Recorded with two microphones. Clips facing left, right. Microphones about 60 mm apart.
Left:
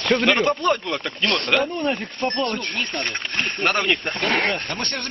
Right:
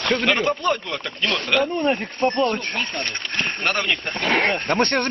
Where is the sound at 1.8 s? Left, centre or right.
Right.